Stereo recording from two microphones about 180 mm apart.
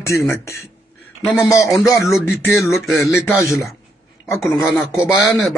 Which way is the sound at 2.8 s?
Centre (ahead or behind).